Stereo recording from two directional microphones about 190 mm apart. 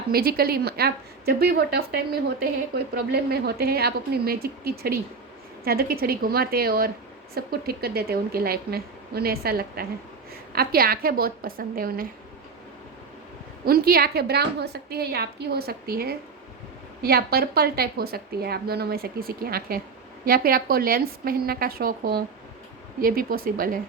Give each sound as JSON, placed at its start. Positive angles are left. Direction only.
{"t": 0.1, "sound": "a woman's voice", "side_deg": -55}
{"t": 13.7, "sound": "a woman's voice", "side_deg": -55}